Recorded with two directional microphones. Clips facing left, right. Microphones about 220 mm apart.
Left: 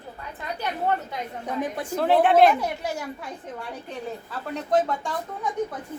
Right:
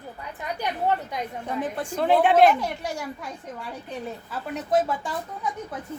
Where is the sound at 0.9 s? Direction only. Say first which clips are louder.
Even; 20° right (ahead or behind).